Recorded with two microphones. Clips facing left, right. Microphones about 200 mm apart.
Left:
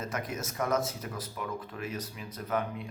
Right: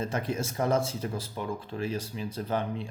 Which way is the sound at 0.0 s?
30° right (ahead or behind).